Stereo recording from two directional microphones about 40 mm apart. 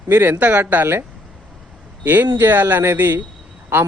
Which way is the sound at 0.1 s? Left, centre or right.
Right.